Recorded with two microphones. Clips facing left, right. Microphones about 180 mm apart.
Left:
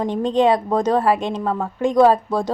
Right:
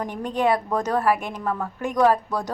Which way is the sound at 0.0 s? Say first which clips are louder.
Left 6 dB; 25° left (ahead or behind).